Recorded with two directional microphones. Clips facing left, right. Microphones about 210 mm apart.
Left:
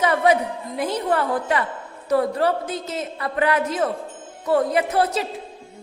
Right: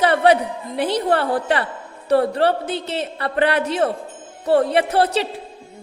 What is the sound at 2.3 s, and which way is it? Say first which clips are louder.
Speech: right 3 dB; 65° right (ahead or behind).